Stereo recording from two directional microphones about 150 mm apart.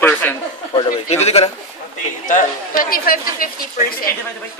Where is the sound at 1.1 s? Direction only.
45° left (ahead or behind).